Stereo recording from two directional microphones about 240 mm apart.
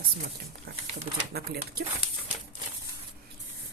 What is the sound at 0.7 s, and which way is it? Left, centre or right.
Speech, right.